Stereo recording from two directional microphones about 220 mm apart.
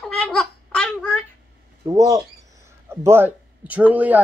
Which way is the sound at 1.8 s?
15° right (ahead or behind).